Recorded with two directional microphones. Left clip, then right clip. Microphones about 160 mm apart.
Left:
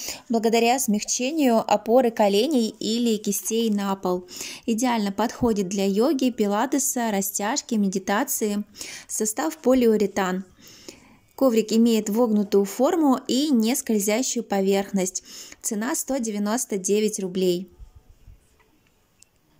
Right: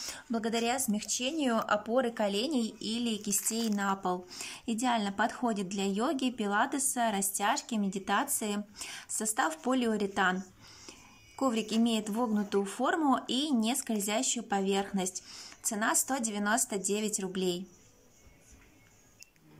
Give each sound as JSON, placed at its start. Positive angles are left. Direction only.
{"t": 0.0, "sound": "speech", "side_deg": 20}